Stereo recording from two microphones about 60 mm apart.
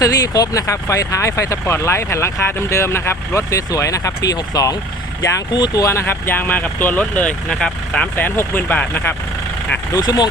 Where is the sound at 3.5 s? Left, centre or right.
Left.